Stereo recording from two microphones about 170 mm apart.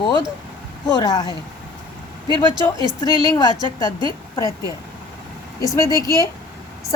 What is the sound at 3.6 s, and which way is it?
Speech, 30° right (ahead or behind).